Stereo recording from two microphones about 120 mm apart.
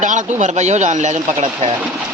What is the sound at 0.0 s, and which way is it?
Speech, 90° right.